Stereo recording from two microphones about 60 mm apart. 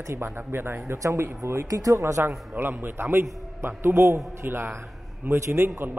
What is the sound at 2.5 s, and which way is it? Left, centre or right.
A man's voice, right.